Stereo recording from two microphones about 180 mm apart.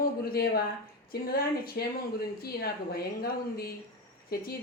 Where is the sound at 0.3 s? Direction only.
60° left (ahead or behind).